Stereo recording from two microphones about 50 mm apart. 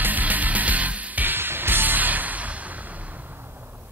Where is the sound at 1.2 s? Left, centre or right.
Right.